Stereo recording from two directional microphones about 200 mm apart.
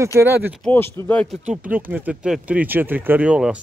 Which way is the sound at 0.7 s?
10° left (ahead or behind).